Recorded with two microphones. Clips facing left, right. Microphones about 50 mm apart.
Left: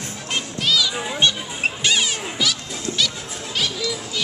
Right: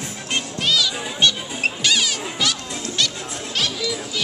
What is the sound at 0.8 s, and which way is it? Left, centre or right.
Children playing, centre.